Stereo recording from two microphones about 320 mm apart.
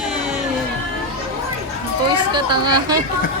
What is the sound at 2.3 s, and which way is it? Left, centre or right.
Speech, centre.